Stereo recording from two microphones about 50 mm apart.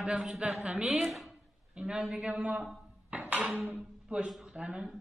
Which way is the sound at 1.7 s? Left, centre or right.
Centre.